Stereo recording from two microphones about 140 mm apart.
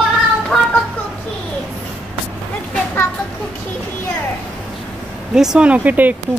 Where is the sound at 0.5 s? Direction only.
5° left (ahead or behind).